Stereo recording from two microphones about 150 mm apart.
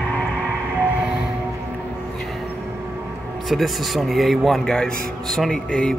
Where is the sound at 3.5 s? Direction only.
Centre (ahead or behind).